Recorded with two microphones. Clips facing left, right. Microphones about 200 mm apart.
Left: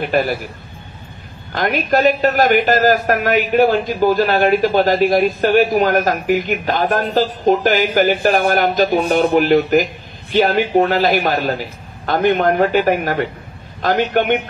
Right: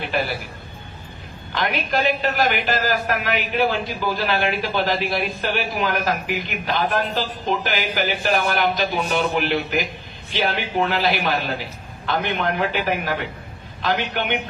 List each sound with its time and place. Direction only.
0.0 s a man's voice: 45° left (ahead or behind)
1.5 s a man's voice: 45° left (ahead or behind)